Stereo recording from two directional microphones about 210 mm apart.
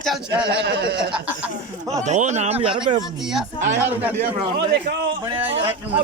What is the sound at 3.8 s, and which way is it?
Speech, 10° right (ahead or behind).